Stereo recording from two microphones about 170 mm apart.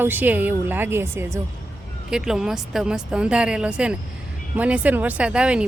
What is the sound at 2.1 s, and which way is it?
Speech, 5° right (ahead or behind).